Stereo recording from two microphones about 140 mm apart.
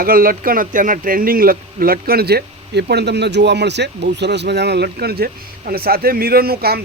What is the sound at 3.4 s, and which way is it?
Speech, 90° right.